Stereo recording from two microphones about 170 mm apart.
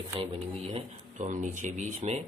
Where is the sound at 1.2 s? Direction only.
45° right (ahead or behind).